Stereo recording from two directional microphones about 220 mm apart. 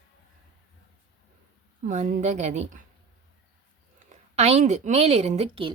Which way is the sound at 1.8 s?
35° right (ahead or behind).